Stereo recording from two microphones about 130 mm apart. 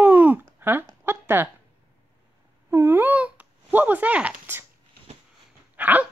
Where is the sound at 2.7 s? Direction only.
15° right (ahead or behind).